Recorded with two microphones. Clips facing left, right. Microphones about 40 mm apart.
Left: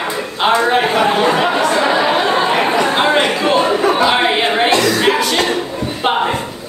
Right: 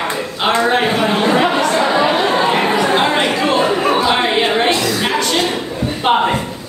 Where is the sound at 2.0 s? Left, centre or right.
Centre.